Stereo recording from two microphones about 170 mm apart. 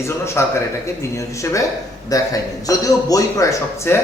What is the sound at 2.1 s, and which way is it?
A man's voice, 20° left (ahead or behind).